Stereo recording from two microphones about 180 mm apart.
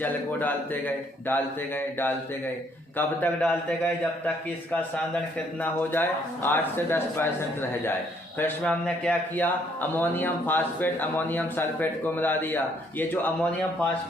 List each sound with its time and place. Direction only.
0.0 s speech: 10° left (ahead or behind)